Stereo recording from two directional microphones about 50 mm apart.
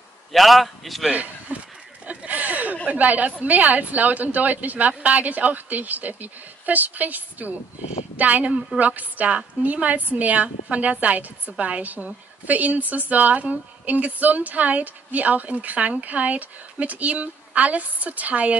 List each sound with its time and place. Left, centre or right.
0.3 s a man's voice: centre
1.1 s speech: right
2.0 s a sound: right
2.9 s a woman's voice: right